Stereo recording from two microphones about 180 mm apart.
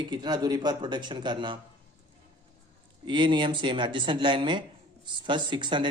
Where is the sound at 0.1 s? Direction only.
25° right (ahead or behind).